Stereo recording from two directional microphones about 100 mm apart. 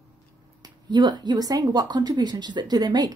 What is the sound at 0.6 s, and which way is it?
Speech, 45° right (ahead or behind).